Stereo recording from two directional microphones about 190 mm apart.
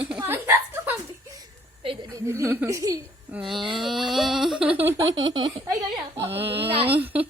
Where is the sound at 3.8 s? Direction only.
Centre (ahead or behind).